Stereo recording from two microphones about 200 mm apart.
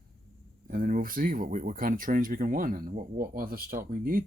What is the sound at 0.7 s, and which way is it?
Speech, 45° right (ahead or behind).